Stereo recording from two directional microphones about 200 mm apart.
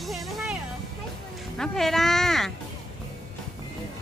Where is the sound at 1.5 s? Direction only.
Centre (ahead or behind).